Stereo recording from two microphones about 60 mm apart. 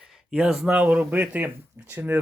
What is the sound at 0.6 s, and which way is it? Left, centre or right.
Speech, right.